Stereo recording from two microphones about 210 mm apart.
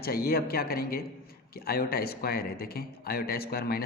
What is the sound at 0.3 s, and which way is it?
Speech, 45° left (ahead or behind).